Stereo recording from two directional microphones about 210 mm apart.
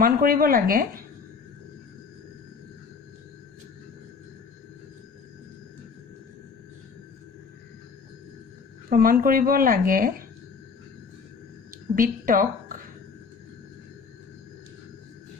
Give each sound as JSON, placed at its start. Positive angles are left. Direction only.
{"t": 0.0, "sound": "speech", "side_deg": -45}
{"t": 8.9, "sound": "speech", "side_deg": -45}
{"t": 11.7, "sound": "a woman's voice", "side_deg": -40}